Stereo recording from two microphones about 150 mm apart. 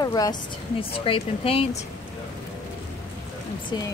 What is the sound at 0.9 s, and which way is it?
Speech, 40° left (ahead or behind).